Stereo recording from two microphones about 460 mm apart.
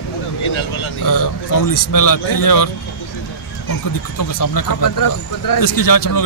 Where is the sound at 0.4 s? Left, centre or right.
Left.